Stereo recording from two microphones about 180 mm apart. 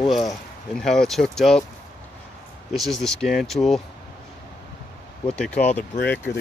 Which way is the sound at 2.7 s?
Centre (ahead or behind).